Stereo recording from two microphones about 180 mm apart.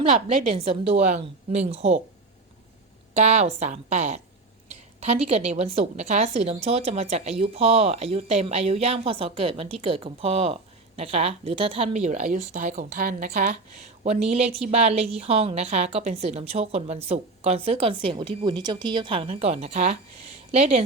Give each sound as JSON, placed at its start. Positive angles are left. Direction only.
{"t": 0.0, "sound": "a woman's voice", "side_deg": -35}
{"t": 3.2, "sound": "a woman's voice", "side_deg": -35}